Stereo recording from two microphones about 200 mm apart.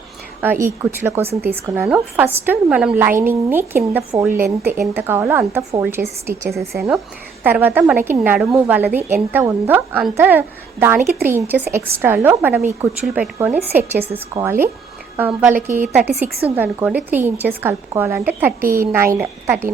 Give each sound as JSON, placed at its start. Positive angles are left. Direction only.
{"t": 0.6, "sound": "a woman's voice", "side_deg": -10}
{"t": 14.0, "sound": "speech", "side_deg": -30}
{"t": 15.1, "sound": "a woman's voice", "side_deg": -10}